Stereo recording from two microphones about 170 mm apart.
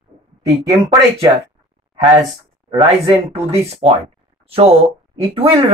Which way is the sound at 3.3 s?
35° right (ahead or behind).